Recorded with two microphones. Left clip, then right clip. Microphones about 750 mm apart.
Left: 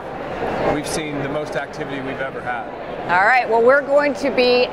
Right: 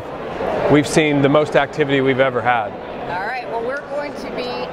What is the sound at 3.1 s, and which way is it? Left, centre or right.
Speech, left.